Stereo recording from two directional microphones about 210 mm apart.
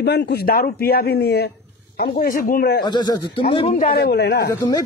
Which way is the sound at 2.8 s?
20° left (ahead or behind).